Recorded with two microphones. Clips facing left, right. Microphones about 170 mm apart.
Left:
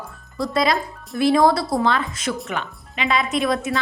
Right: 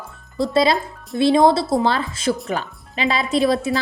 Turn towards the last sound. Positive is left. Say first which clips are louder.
# right 3 dB
turn(degrees=-30)  # may be behind; listen again after turning